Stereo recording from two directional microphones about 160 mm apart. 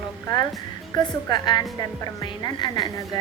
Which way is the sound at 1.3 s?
25° left (ahead or behind).